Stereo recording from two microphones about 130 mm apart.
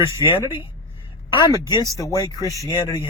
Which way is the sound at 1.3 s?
35° left (ahead or behind).